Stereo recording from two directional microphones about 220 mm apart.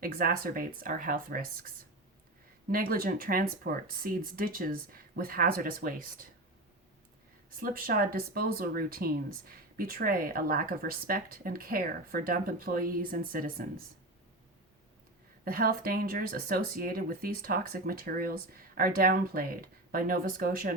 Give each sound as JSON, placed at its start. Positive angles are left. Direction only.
{"t": 0.0, "sound": "speech", "side_deg": -40}
{"t": 7.6, "sound": "speech", "side_deg": -40}
{"t": 15.4, "sound": "speech", "side_deg": -40}